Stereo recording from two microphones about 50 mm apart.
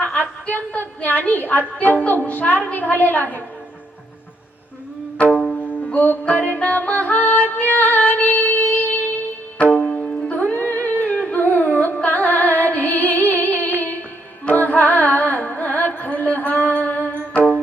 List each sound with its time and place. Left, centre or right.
0.0 s a sound: left
2.0 s a woman's voice: left
5.3 s music: centre
5.5 s music: left
9.6 s music: left
10.3 s humming: left
14.4 s carnatic music: left
16.6 s music: left